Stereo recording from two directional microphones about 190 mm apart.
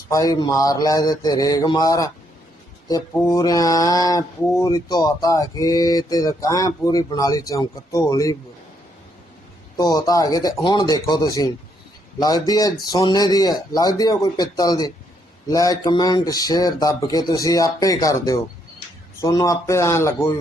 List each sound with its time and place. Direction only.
0.1 s speech: 20° left (ahead or behind)
9.7 s speech: 20° left (ahead or behind)